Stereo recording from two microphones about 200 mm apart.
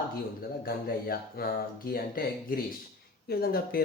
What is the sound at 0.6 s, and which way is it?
Speech, 50° left (ahead or behind).